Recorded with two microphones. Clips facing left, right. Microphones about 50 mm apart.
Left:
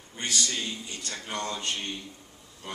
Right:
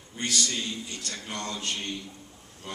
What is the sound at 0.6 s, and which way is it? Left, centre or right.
A man's voice, centre.